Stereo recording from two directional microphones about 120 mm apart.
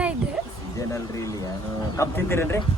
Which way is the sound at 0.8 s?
25° left (ahead or behind).